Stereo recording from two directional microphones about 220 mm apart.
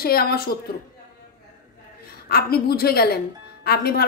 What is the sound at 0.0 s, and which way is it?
Speech, 45° left (ahead or behind).